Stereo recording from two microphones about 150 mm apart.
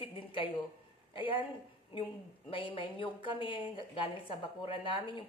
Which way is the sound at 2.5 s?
35° left (ahead or behind).